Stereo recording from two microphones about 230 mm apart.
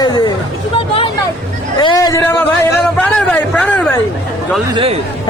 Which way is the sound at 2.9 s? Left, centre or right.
Centre.